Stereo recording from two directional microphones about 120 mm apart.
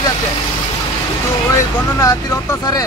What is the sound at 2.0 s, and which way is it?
Speech, 25° left (ahead or behind).